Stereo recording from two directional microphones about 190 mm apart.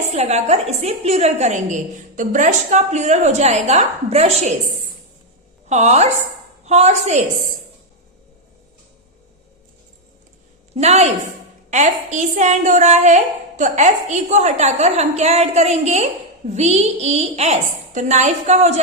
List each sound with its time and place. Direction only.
0.1 s a woman's voice: 35° right (ahead or behind)
5.6 s a woman's voice: 35° right (ahead or behind)
10.8 s a woman's voice: 35° right (ahead or behind)